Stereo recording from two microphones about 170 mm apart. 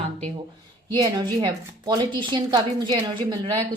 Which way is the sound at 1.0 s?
25° right (ahead or behind).